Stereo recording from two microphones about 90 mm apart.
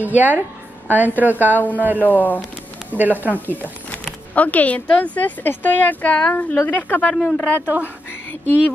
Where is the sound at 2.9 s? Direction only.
20° right (ahead or behind).